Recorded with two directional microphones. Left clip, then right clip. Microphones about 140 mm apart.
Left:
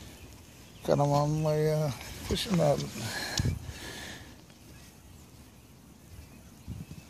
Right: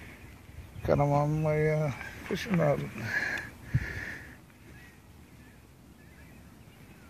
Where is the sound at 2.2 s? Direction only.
10° left (ahead or behind).